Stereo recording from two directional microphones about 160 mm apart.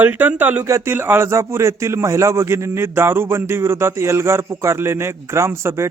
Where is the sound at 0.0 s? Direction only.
10° right (ahead or behind).